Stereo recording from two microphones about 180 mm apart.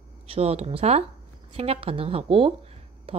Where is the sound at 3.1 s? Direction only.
30° right (ahead or behind).